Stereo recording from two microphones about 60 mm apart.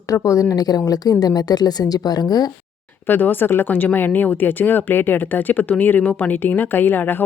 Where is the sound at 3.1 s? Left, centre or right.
Left.